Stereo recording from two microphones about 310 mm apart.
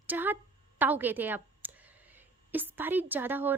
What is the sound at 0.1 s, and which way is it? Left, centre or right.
A woman's voice, centre.